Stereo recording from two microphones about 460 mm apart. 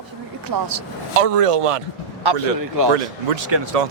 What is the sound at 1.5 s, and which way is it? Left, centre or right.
Speech, right.